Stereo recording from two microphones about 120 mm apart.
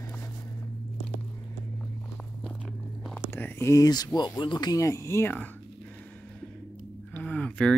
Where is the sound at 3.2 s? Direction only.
15° left (ahead or behind).